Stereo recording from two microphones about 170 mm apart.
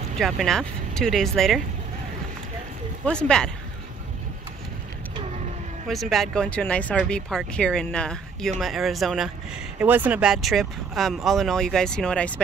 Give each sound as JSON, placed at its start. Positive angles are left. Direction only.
{"t": 0.2, "sound": "speech", "side_deg": 0}
{"t": 3.1, "sound": "speech", "side_deg": 5}
{"t": 5.9, "sound": "speech", "side_deg": 0}